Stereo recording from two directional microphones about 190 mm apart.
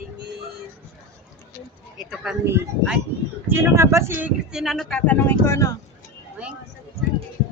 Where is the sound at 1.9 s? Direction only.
5° right (ahead or behind).